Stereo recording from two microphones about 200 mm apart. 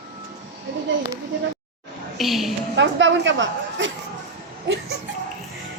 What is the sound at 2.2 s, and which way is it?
Speech, centre (ahead or behind).